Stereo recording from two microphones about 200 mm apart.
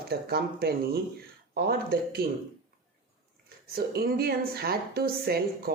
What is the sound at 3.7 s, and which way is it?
Speech, 50° right (ahead or behind).